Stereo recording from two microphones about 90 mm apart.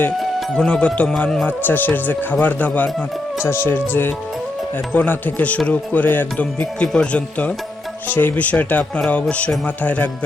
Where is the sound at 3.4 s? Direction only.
25° left (ahead or behind).